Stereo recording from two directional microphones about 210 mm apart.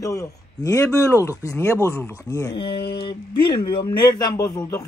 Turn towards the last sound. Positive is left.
turn(degrees=15)  # may be behind; listen again after turning